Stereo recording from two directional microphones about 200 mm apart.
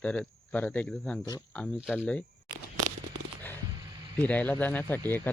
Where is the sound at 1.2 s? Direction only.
20° left (ahead or behind).